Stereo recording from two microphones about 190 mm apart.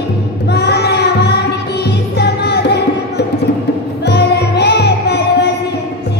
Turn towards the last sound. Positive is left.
turn(degrees=60)  # may be behind; listen again after turning